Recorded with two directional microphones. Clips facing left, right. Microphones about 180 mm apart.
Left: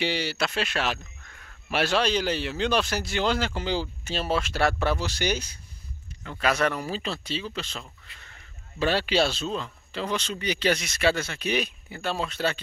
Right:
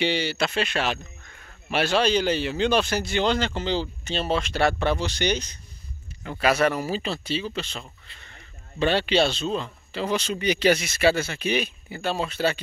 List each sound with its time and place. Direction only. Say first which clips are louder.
0.0 s speech: right 3 dB; centre (ahead or behind)
6.4 s speech: right 3 dB; 5° right (ahead or behind)
8.1 s speech: right 1 dB; 30° right (ahead or behind)
8.7 s speech: right 2 dB; 5° left (ahead or behind); by 10.7 s 15° right (ahead or behind)
10.7 s speech: right 3 dB; 5° right (ahead or behind)